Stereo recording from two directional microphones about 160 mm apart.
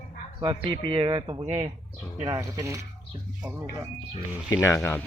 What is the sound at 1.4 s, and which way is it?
Speech, 40° right (ahead or behind).